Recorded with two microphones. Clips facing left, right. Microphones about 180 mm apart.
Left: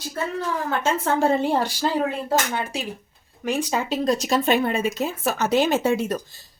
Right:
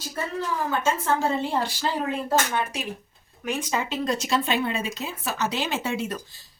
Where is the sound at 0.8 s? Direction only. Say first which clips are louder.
Left 4 dB; 65° left (ahead or behind).